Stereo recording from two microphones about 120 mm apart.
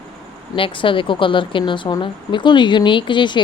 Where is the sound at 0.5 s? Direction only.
45° left (ahead or behind).